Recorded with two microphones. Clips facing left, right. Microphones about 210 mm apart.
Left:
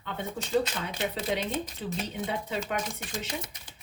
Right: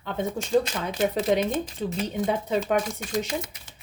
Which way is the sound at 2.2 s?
45° right (ahead or behind).